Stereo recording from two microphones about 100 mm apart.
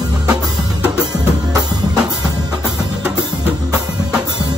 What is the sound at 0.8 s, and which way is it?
Music, 10° right (ahead or behind).